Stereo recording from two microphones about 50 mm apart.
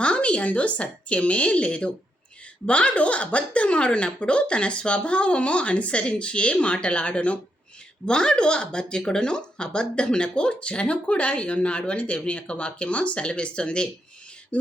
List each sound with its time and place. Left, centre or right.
0.0 s speech: left